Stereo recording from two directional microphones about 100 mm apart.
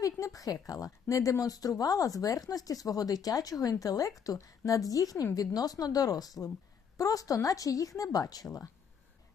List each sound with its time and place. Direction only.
0.0 s speech: 35° left (ahead or behind)